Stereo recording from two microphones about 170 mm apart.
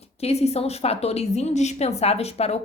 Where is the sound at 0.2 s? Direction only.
40° left (ahead or behind).